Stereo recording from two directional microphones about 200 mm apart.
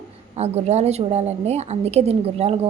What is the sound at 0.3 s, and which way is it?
A woman's voice, 30° right (ahead or behind).